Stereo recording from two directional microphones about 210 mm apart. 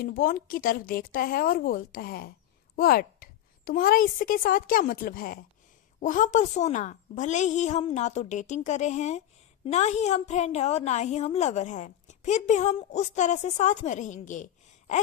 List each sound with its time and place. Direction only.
0.0 s a woman's voice: 45° left (ahead or behind)